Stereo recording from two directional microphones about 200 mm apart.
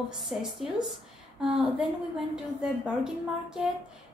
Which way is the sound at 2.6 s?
5° right (ahead or behind).